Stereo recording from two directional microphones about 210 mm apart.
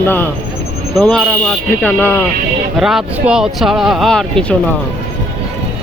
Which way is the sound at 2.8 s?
Centre (ahead or behind).